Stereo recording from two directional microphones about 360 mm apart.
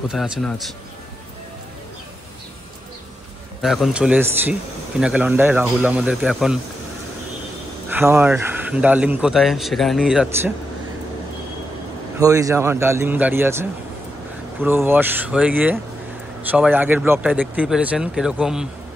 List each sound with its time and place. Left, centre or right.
0.1 s a man's voice: centre
3.6 s a man's voice: centre
7.9 s a man's voice: centre
12.2 s a man's voice: centre